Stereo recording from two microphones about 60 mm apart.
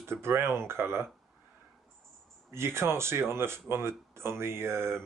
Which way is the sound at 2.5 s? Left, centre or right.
Right.